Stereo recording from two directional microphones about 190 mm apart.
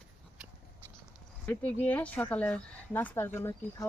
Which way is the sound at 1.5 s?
5° left (ahead or behind).